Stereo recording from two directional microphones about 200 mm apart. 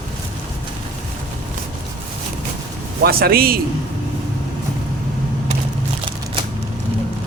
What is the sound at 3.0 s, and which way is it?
Speech, 50° right (ahead or behind).